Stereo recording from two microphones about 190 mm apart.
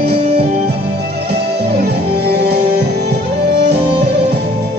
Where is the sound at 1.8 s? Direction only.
55° right (ahead or behind).